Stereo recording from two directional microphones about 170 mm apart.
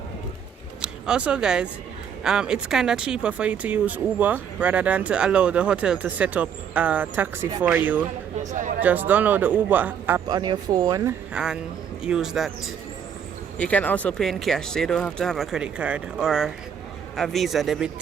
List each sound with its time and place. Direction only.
0.8 s speech: 5° right (ahead or behind)
8.4 s speech: 45° right (ahead or behind)
8.8 s speech: 10° right (ahead or behind)
10.2 s speech: 25° right (ahead or behind)
11.3 s speech: 5° right (ahead or behind)
13.6 s speech: 10° left (ahead or behind)